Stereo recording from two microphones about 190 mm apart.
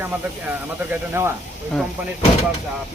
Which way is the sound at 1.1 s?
15° right (ahead or behind).